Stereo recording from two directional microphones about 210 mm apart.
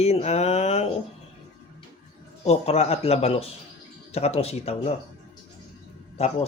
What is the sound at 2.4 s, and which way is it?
Speech, 30° left (ahead or behind).